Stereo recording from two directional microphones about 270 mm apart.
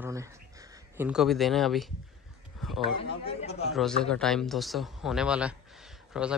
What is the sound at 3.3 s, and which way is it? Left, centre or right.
Speech, left.